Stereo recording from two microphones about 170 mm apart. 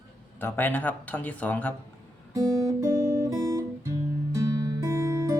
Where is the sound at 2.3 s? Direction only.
20° right (ahead or behind).